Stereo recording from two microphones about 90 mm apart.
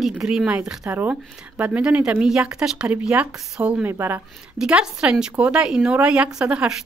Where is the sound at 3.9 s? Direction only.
25° right (ahead or behind).